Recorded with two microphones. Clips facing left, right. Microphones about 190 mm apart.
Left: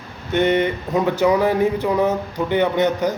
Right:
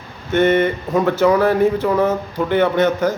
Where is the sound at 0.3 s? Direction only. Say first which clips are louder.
Right 3 dB; 15° left (ahead or behind).